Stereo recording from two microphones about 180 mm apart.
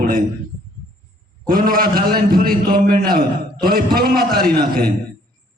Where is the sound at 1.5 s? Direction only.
55° right (ahead or behind).